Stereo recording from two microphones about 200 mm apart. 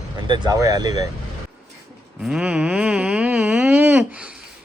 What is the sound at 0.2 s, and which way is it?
Speech, 20° right (ahead or behind).